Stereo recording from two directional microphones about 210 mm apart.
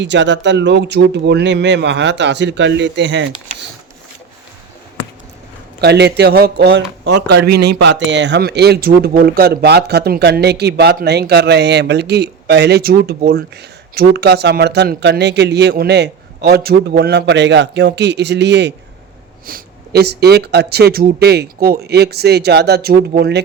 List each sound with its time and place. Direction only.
0.0 s speech: 55° right (ahead or behind)
5.8 s a man's voice: 50° right (ahead or behind)